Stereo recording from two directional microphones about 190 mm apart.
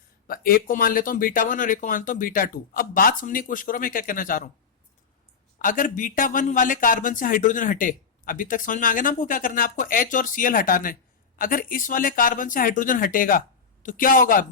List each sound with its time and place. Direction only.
0.3 s a man's voice: 50° left (ahead or behind)
5.5 s a man's voice: 45° left (ahead or behind)